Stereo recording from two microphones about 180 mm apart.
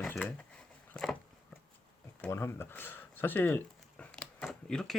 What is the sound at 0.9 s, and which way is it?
Dog, 5° left (ahead or behind).